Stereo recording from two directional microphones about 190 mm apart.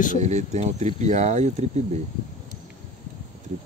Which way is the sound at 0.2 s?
35° right (ahead or behind).